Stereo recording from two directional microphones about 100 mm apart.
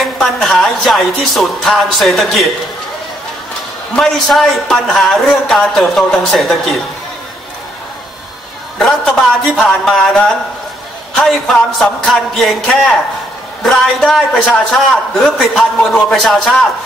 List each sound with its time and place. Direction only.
0.0 s a man's voice: 5° left (ahead or behind)
3.9 s a man's voice: 5° left (ahead or behind)
8.7 s a man's voice: 5° left (ahead or behind)